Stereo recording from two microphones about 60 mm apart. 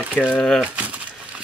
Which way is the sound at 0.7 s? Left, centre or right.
Right.